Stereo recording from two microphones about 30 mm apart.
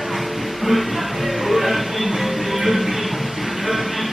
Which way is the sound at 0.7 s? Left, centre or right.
Centre.